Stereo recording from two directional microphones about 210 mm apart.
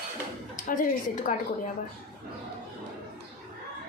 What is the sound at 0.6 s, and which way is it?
Speech, 40° left (ahead or behind).